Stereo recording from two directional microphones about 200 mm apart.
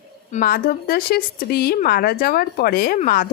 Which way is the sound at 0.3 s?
45° left (ahead or behind).